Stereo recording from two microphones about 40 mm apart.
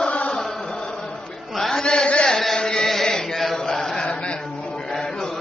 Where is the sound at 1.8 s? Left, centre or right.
Left.